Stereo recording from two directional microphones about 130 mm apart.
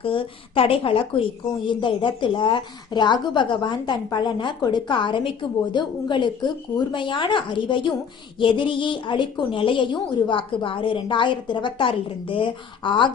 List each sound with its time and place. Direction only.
0.0 s a woman's voice: 45° left (ahead or behind)